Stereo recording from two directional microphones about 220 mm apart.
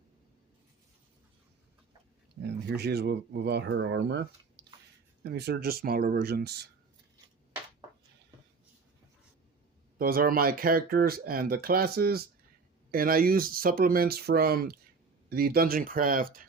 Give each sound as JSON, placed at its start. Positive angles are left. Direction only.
{"t": 2.4, "sound": "speech", "side_deg": -50}
{"t": 10.0, "sound": "speech", "side_deg": -40}